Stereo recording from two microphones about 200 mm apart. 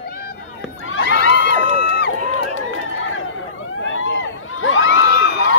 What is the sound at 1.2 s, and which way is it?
Crowd, 60° left (ahead or behind).